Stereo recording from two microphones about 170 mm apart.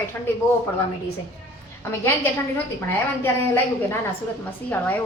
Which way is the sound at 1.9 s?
15° left (ahead or behind).